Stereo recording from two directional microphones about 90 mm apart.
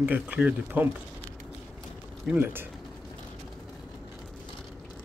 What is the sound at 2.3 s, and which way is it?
Speech, 25° right (ahead or behind).